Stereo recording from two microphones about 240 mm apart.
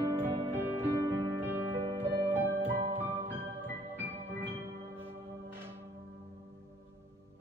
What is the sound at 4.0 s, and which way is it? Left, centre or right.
Music, centre.